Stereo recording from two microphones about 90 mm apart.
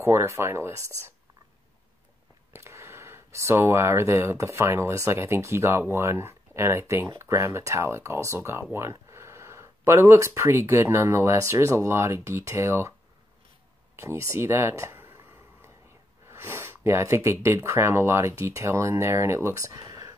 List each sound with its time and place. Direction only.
0.0 s speech: 30° right (ahead or behind)
2.5 s speech: 30° right (ahead or behind)
13.9 s a sound: 30° right (ahead or behind)
16.3 s speech: 25° right (ahead or behind)
19.8 s whispering: 45° right (ahead or behind)